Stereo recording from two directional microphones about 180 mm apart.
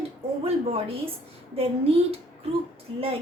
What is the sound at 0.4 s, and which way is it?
Speech, 30° right (ahead or behind).